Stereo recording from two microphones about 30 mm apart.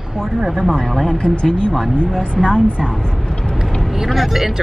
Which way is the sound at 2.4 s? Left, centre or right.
Centre.